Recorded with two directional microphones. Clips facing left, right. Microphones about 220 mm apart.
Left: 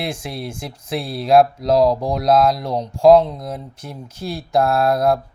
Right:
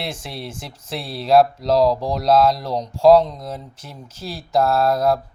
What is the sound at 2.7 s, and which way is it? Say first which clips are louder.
Speech: left 2 dB; 10° left (ahead or behind).